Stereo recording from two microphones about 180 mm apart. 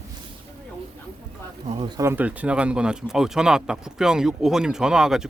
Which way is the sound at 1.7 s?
30° right (ahead or behind).